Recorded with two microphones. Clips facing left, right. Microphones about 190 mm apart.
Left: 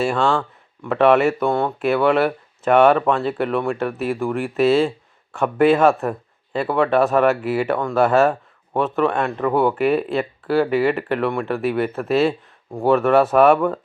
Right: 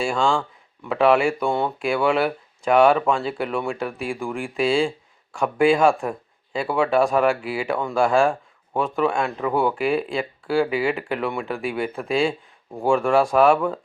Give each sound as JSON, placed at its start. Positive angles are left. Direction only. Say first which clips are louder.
{"t": 0.0, "sound": "speech", "louder": "left 2 dB", "side_deg": 5}